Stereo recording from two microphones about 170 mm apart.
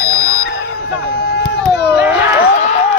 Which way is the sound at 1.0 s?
70° left (ahead or behind).